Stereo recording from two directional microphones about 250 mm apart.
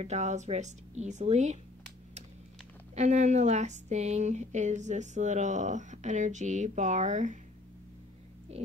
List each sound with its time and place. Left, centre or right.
0.0 s speech: right
2.9 s speech: right